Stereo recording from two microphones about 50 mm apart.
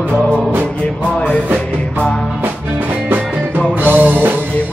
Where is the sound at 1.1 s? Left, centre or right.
Centre.